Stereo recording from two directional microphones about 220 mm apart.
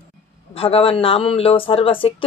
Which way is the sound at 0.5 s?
25° left (ahead or behind).